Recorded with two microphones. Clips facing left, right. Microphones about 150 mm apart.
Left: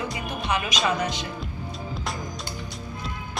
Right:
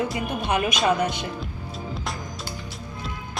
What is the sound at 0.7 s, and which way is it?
Speech, 55° right (ahead or behind).